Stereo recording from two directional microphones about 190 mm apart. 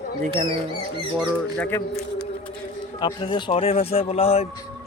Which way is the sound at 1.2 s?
5° left (ahead or behind).